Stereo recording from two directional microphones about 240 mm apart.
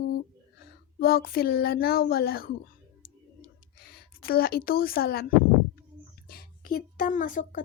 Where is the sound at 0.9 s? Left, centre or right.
Left.